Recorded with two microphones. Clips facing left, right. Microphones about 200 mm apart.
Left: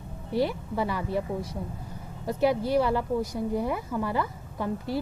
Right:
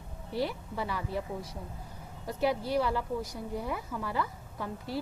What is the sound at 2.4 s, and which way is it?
A woman's voice, 60° left (ahead or behind).